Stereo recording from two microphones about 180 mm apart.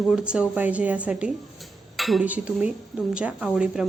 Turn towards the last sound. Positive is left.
turn(degrees=-5)  # may be behind; listen again after turning